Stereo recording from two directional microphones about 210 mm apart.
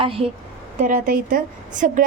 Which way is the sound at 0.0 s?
25° right (ahead or behind).